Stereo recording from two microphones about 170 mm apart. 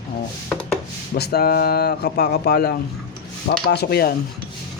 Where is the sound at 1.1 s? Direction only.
70° left (ahead or behind).